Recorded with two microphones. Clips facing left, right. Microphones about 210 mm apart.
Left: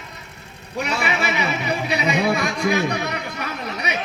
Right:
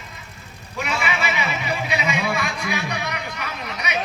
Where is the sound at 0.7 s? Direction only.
40° left (ahead or behind).